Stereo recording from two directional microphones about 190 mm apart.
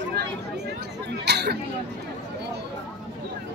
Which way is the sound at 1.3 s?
60° right (ahead or behind).